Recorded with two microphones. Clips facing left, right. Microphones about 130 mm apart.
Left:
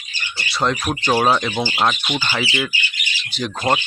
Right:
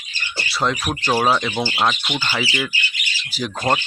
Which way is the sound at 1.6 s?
15° left (ahead or behind).